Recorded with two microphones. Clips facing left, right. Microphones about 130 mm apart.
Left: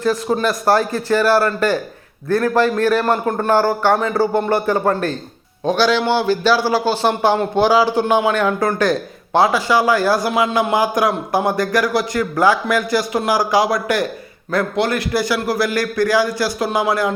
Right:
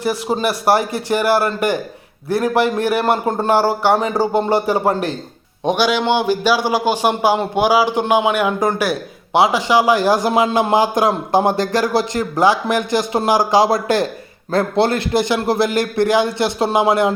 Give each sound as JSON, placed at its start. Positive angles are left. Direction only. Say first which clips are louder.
{"t": 0.0, "sound": "a man's voice", "louder": "left 1 dB", "side_deg": -15}